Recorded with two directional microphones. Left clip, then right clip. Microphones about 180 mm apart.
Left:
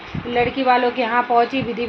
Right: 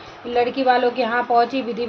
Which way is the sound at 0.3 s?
5° right (ahead or behind).